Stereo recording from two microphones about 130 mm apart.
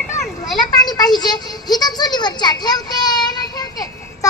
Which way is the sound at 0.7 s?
30° left (ahead or behind).